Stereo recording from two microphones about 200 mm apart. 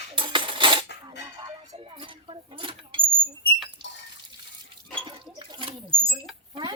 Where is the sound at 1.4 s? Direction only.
25° right (ahead or behind).